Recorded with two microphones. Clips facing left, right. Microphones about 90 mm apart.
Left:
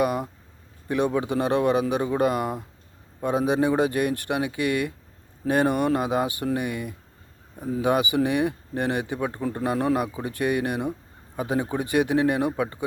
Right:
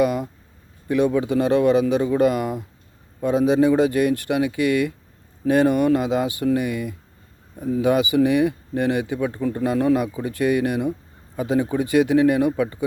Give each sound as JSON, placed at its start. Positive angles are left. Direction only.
{"t": 0.0, "sound": "a man's voice", "side_deg": 45}